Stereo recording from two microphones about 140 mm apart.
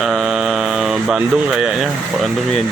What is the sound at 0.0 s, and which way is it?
Speech, centre (ahead or behind).